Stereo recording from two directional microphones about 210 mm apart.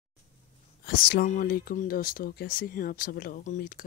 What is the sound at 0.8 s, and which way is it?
Speech, 45° left (ahead or behind).